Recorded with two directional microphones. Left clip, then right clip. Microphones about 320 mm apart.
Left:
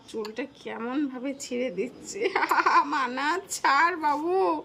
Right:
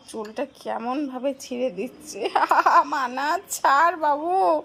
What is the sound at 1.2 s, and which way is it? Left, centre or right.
Speech, centre.